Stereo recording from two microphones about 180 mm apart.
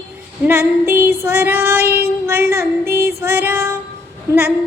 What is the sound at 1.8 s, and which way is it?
Child singing, 60° right (ahead or behind).